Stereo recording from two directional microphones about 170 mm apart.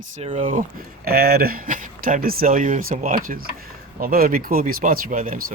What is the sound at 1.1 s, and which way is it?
Speech, 65° right (ahead or behind).